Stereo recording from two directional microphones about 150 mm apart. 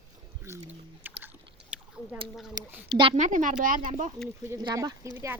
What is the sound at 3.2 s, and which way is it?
Speech, 60° right (ahead or behind).